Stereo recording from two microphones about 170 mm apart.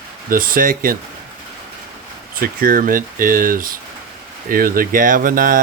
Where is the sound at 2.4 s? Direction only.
55° right (ahead or behind).